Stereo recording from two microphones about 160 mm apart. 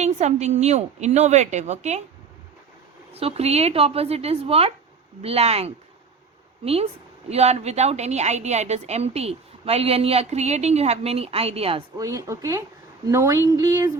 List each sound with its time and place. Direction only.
0.0 s a woman's voice: 45° right (ahead or behind)
3.2 s speech: 40° right (ahead or behind)
7.3 s a woman's voice: 40° right (ahead or behind)
11.9 s speech: 20° right (ahead or behind)